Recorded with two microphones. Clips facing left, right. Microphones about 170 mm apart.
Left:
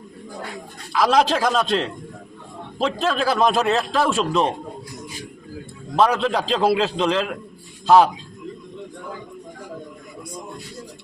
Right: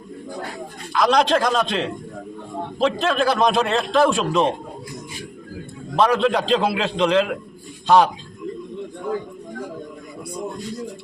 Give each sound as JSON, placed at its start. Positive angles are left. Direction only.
{"t": 0.9, "sound": "a man's voice", "side_deg": 5}
{"t": 6.0, "sound": "a man's voice", "side_deg": 0}